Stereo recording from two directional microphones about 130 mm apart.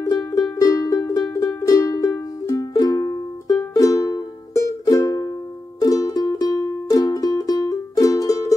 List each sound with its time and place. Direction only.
0.0 s music: 25° left (ahead or behind)